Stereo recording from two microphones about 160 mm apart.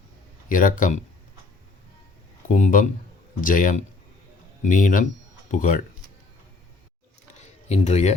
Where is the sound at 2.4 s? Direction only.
50° left (ahead or behind).